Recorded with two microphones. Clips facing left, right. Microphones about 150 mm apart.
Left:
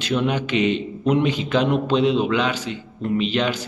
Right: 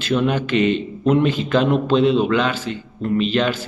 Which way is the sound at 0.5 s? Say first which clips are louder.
Right 3 dB; 50° right (ahead or behind).